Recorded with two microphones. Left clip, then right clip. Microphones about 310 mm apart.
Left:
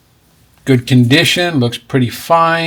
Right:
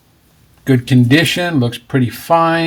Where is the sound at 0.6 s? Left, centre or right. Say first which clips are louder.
Left 2 dB; centre.